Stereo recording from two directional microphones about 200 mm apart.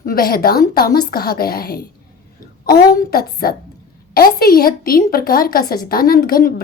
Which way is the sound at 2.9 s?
50° left (ahead or behind).